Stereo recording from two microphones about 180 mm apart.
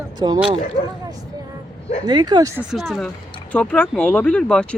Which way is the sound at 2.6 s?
Centre (ahead or behind).